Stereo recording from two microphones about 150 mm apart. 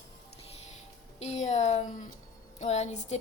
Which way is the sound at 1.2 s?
50° left (ahead or behind).